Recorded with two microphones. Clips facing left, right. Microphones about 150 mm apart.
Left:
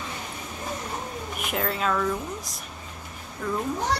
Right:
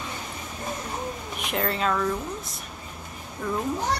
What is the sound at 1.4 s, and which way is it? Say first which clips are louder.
Speech: right 1 dB; 5° left (ahead or behind).